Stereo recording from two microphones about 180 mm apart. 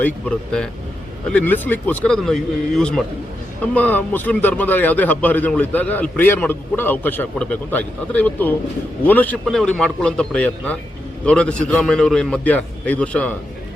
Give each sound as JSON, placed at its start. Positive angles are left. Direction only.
{"t": 0.0, "sound": "a man's voice", "side_deg": 5}